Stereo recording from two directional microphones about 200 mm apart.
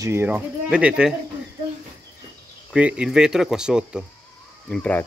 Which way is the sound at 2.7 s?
5° right (ahead or behind).